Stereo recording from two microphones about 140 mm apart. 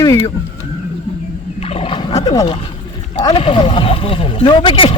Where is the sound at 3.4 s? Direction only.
35° left (ahead or behind).